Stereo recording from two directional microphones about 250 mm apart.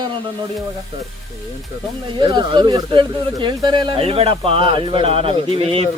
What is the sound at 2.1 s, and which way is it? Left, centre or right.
Speech, centre.